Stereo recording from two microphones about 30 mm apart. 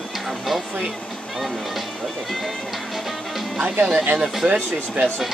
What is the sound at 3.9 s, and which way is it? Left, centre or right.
Speech, right.